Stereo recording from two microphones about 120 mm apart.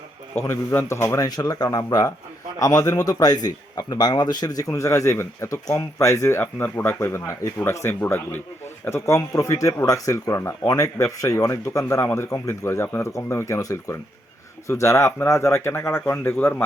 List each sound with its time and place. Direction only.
0.3 s speech: 25° left (ahead or behind)